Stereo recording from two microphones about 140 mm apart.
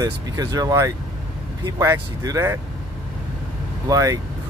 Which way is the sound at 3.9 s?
25° right (ahead or behind).